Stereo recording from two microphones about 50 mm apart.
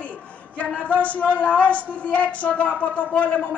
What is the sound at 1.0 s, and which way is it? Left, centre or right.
A woman's voice, left.